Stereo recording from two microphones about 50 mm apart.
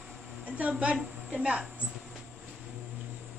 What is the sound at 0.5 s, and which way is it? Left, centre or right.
A woman's voice, right.